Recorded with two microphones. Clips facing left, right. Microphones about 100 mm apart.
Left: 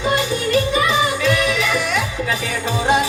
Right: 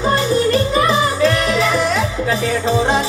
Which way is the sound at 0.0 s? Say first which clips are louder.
Right 4 dB; 35° right (ahead or behind).